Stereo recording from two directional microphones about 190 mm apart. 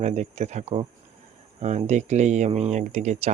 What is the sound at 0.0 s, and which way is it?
Speech, 35° right (ahead or behind).